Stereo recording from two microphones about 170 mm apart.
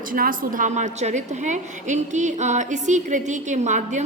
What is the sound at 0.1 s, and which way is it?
A woman's voice, 55° right (ahead or behind).